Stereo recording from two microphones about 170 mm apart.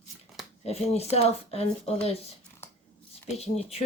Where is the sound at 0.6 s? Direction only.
35° left (ahead or behind).